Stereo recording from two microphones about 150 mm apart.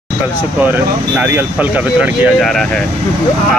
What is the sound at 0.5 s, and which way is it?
Speech, 10° right (ahead or behind).